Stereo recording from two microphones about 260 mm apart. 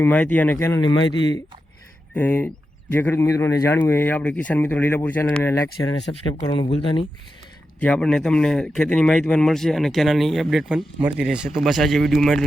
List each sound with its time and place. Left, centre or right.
0.0 s speech: centre
6.1 s speech: centre
7.8 s a man's voice: centre